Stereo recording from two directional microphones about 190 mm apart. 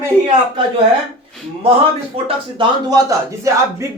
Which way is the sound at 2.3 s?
25° right (ahead or behind).